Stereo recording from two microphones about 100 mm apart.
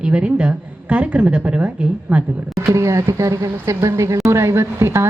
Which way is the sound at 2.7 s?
30° right (ahead or behind).